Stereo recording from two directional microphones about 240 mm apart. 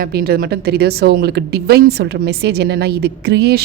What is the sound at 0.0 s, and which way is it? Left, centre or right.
A woman's voice, right.